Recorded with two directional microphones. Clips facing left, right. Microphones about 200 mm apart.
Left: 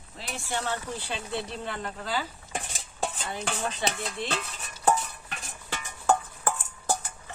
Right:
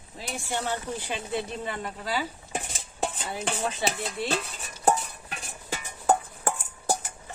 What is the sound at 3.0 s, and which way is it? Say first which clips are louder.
Stir: right 1 dB; 5° right (ahead or behind).